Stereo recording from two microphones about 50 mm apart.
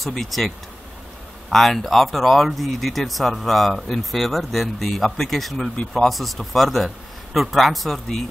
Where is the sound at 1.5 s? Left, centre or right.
Centre.